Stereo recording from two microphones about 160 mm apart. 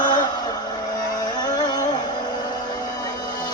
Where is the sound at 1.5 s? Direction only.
25° left (ahead or behind).